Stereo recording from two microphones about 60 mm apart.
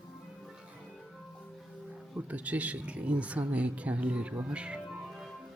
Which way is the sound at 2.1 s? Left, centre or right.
Right.